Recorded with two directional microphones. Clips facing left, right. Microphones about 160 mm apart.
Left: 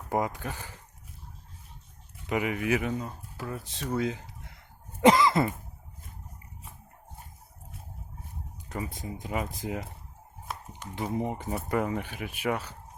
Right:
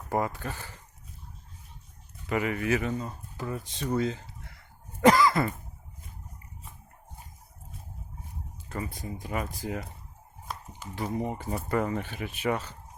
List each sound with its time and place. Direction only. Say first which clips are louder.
0.1 s speech: even; 15° left (ahead or behind)
2.2 s speech: even; 15° left (ahead or behind)
5.0 s cough: even; 20° left (ahead or behind)
8.7 s speech: even; 20° left (ahead or behind)
10.5 s a sound: even; centre (ahead or behind)
10.9 s speech: left 1 dB; 20° left (ahead or behind)